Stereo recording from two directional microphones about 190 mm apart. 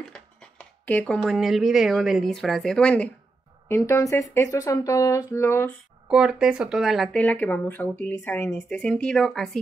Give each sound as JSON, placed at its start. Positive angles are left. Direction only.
{"t": 0.0, "sound": "speech", "side_deg": 5}
{"t": 6.0, "sound": "speech", "side_deg": -5}